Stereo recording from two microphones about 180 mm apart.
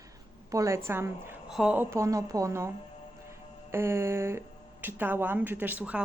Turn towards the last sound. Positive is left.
turn(degrees=-5)  # may be behind; listen again after turning